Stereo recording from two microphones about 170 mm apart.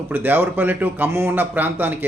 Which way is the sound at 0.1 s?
10° right (ahead or behind).